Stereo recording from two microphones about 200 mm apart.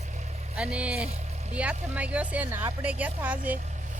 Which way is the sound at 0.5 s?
5° right (ahead or behind).